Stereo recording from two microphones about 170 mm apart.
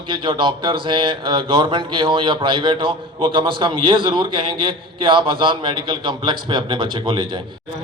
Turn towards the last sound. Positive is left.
turn(degrees=-30)  # may be behind; listen again after turning